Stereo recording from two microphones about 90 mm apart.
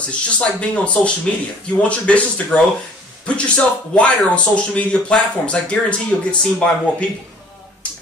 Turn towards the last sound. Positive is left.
turn(degrees=15)  # may be behind; listen again after turning